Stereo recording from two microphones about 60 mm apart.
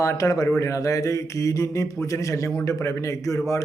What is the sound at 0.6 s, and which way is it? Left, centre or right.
A man's voice, left.